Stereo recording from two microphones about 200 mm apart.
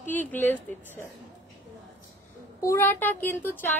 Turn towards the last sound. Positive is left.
turn(degrees=10)  # may be behind; listen again after turning